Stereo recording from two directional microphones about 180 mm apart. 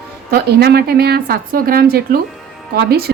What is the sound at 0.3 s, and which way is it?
A woman's voice, 60° right (ahead or behind).